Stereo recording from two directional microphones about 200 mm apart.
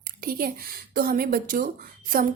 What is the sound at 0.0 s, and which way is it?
Speech, 50° right (ahead or behind).